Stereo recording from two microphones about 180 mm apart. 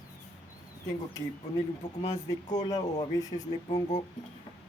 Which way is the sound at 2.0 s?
20° left (ahead or behind).